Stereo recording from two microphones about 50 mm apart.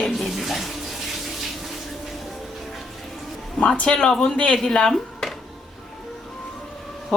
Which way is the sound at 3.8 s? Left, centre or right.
Centre.